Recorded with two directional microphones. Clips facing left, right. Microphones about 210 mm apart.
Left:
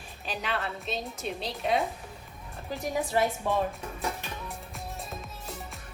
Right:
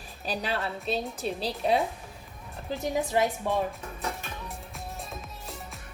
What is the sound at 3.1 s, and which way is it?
Speech, 15° right (ahead or behind).